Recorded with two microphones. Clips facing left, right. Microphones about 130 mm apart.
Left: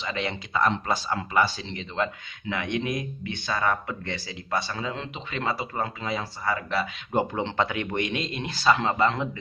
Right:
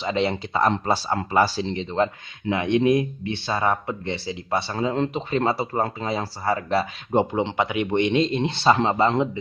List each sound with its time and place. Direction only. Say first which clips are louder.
0.0 s speech: right 7 dB; 30° right (ahead or behind)
4.7 s speech: right 9 dB; 40° right (ahead or behind)